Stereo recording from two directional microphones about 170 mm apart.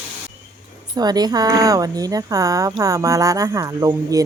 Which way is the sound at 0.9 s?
25° right (ahead or behind).